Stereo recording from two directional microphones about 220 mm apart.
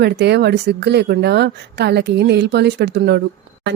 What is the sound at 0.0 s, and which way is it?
Speech, 50° right (ahead or behind).